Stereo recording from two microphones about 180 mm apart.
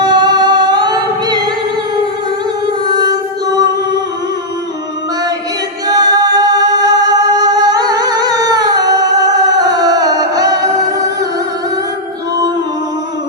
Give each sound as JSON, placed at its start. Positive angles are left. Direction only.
{"t": 0.0, "sound": "singing", "side_deg": -25}
{"t": 2.8, "sound": "music", "side_deg": -20}
{"t": 5.9, "sound": "music", "side_deg": -20}